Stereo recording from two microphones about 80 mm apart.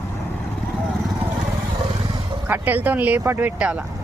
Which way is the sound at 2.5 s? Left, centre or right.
Right.